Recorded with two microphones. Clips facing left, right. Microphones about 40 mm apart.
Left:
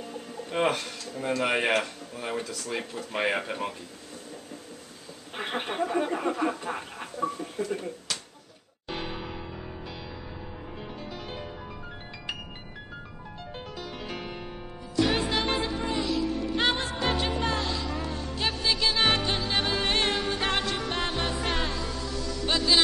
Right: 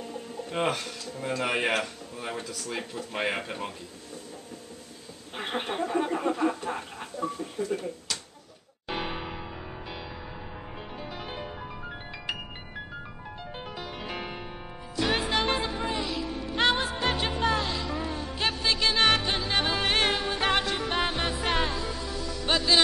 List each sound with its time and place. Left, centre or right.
0.5 s speech: centre
5.4 s a sound: centre
6.6 s speech: centre
7.2 s a sound: centre
8.8 s music: centre
11.0 s music: centre
13.7 s music: centre